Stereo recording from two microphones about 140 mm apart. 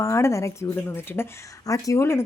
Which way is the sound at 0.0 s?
20° left (ahead or behind).